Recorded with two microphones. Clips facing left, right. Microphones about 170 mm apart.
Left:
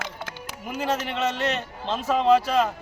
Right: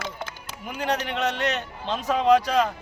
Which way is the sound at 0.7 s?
5° left (ahead or behind).